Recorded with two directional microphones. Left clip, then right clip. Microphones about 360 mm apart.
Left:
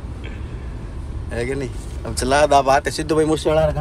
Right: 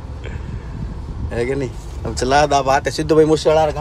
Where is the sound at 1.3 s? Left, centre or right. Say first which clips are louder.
Right 4 dB; centre.